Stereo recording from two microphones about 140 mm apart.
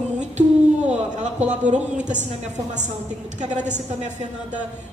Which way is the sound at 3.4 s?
60° right (ahead or behind).